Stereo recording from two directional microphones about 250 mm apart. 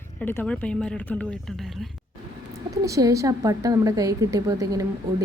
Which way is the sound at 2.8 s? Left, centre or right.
Centre.